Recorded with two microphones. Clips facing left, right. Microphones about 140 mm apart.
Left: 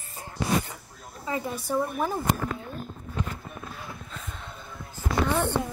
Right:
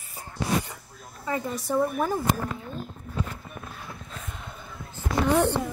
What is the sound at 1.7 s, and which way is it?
Speech, 5° right (ahead or behind).